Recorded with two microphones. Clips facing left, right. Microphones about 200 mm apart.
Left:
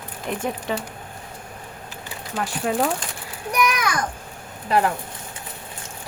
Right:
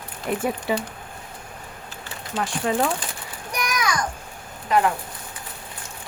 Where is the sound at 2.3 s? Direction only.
Centre (ahead or behind).